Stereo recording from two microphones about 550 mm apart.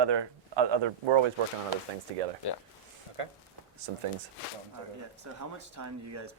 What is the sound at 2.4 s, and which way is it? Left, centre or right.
Speech, left.